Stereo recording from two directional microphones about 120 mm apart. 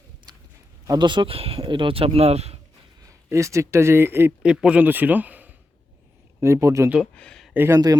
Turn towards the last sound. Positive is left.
turn(degrees=-30)  # may be behind; listen again after turning